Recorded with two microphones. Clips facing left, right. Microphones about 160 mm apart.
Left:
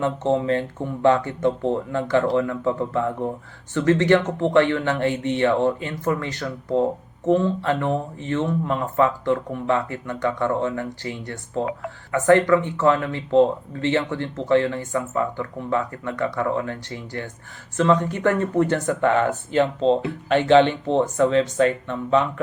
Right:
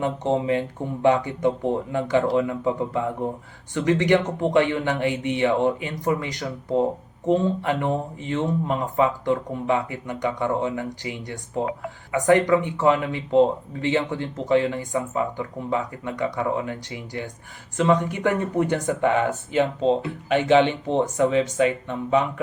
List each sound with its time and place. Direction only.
0.0 s speech: 15° right (ahead or behind)